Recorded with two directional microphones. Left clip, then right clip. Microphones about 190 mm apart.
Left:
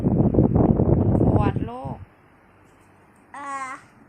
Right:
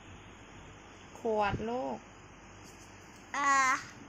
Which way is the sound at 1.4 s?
15° left (ahead or behind).